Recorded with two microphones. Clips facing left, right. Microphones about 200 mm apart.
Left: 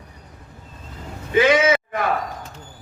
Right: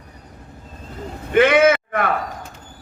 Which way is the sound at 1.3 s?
60° right (ahead or behind).